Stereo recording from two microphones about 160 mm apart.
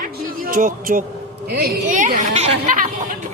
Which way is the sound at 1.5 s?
65° right (ahead or behind).